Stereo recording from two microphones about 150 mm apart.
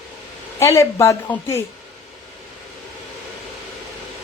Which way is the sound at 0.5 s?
20° left (ahead or behind).